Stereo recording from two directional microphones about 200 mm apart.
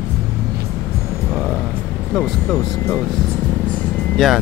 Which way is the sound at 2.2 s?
5° left (ahead or behind).